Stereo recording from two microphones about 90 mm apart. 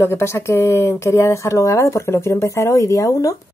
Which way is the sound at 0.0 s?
30° left (ahead or behind).